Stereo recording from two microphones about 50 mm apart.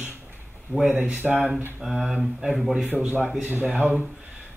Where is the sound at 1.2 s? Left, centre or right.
Centre.